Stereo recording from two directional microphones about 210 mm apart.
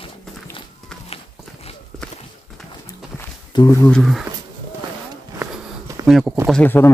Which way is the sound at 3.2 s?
15° left (ahead or behind).